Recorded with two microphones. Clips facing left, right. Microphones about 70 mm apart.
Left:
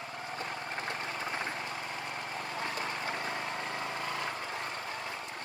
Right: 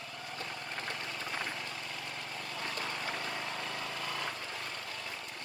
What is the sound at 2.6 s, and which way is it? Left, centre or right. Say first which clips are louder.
Vehicle: left 1 dB; left.